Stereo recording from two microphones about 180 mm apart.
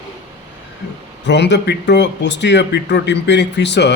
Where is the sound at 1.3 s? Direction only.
75° left (ahead or behind).